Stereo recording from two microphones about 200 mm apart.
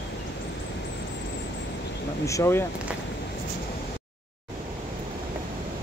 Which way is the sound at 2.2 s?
15° left (ahead or behind).